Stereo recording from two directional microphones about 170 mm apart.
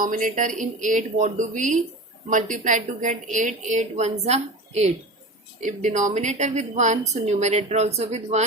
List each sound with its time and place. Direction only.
0.0 s a woman's voice: 50° right (ahead or behind)